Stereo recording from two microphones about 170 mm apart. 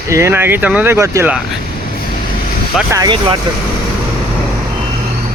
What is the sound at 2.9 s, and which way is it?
Speech, 25° right (ahead or behind).